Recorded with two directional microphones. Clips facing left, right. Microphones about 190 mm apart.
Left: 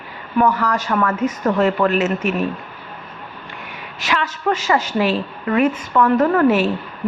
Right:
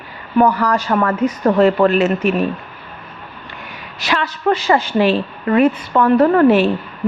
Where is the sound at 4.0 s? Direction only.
35° right (ahead or behind).